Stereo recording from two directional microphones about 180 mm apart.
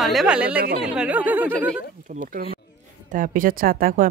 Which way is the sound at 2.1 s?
50° right (ahead or behind).